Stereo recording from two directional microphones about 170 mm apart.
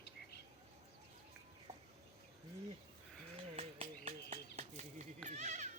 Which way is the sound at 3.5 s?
45° right (ahead or behind).